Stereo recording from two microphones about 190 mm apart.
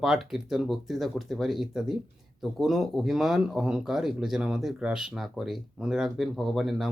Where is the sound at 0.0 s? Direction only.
Centre (ahead or behind).